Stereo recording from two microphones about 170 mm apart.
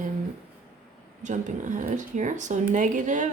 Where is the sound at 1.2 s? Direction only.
45° right (ahead or behind).